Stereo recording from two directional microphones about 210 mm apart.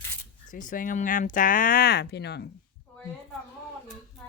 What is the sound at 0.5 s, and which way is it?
Speech, 40° left (ahead or behind).